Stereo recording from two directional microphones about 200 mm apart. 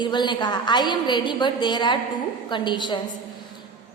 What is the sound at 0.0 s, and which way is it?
A woman's voice, 20° left (ahead or behind).